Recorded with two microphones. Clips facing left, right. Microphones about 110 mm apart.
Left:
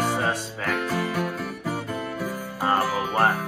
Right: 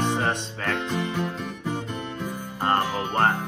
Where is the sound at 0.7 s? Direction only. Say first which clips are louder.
Left 2 dB; 20° right (ahead or behind).